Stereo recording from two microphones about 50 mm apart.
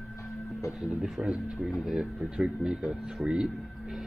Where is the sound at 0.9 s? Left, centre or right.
Centre.